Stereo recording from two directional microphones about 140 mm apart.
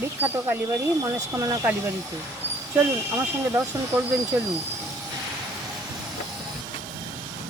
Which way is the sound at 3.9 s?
15° right (ahead or behind).